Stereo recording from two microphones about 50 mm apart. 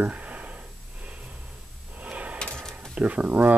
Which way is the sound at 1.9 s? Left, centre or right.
Right.